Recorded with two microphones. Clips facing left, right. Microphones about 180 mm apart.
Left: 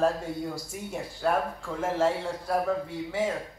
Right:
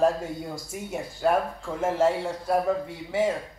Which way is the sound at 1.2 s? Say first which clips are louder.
Right 3 dB; 10° right (ahead or behind).